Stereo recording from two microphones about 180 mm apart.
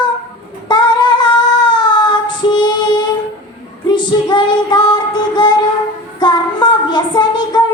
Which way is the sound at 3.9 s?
25° left (ahead or behind).